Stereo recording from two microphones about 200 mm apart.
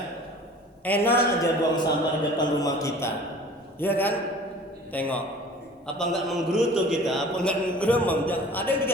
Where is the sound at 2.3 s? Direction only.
20° left (ahead or behind).